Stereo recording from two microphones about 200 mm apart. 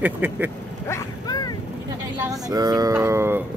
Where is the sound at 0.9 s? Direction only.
20° left (ahead or behind).